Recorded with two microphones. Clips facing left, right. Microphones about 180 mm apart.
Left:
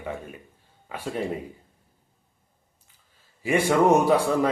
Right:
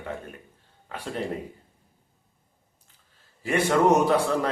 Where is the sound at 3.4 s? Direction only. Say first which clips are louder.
Left 1 dB; 10° left (ahead or behind).